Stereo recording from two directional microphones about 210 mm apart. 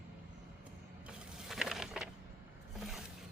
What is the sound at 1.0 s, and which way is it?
Mechanisms, centre (ahead or behind).